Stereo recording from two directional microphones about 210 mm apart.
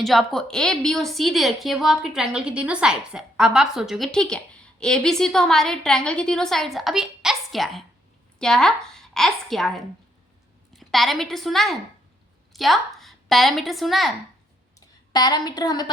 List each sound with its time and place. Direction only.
0.0 s a woman's voice: centre (ahead or behind)
14.8 s speech: 20° left (ahead or behind)